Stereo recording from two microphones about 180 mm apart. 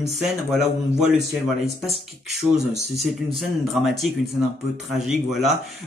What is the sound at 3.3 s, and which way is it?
Speech, centre (ahead or behind).